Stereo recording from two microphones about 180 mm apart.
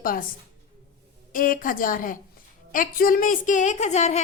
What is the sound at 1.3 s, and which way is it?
A woman's voice, 50° left (ahead or behind).